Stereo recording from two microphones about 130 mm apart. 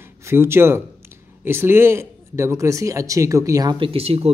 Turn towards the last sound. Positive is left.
turn(degrees=-50)  # may be behind; listen again after turning